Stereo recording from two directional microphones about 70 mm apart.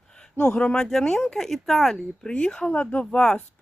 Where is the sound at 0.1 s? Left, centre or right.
Centre.